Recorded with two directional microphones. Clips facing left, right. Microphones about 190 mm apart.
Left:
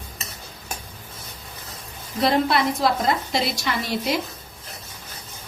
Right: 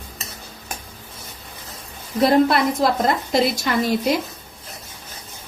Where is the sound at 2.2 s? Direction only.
50° right (ahead or behind).